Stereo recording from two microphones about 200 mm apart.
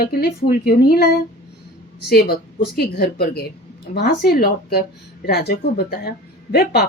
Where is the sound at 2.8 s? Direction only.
50° left (ahead or behind).